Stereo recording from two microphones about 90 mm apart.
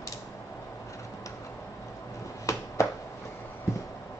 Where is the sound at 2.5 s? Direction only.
35° left (ahead or behind).